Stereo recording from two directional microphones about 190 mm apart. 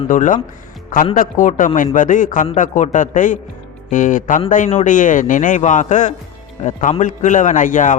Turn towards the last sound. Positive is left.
turn(degrees=45)  # may be behind; listen again after turning